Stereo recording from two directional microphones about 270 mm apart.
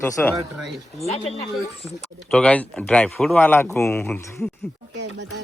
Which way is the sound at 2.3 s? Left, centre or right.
Centre.